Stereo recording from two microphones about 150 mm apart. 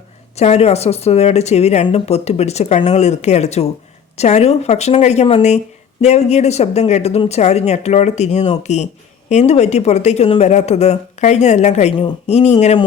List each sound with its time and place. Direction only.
0.3 s a woman's voice: 45° left (ahead or behind)